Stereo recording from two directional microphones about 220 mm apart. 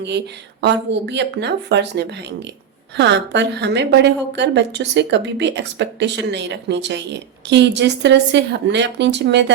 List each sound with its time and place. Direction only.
0.6 s a woman's voice: 50° right (ahead or behind)